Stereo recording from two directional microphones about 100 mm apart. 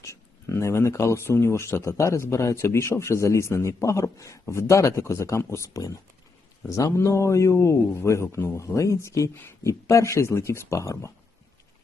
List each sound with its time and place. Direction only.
0.0 s speech: 30° left (ahead or behind)